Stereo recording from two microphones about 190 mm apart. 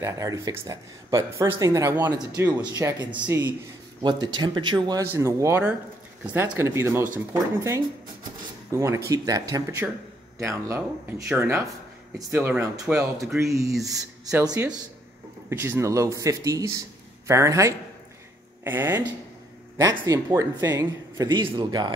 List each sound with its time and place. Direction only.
0.0 s speech: 15° right (ahead or behind)
4.0 s a man's voice: 25° right (ahead or behind)